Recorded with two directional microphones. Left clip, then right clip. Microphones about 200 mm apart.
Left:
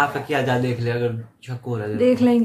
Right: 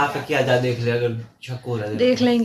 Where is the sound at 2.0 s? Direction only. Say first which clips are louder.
Left 1 dB; 10° left (ahead or behind).